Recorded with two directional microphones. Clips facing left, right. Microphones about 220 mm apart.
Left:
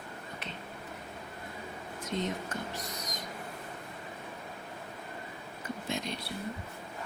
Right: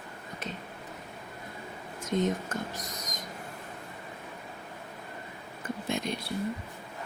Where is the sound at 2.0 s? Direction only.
50° right (ahead or behind).